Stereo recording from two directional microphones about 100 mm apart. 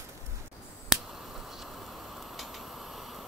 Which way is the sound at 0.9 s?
Centre (ahead or behind).